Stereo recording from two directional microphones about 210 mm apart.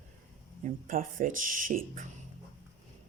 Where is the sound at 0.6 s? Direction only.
40° right (ahead or behind).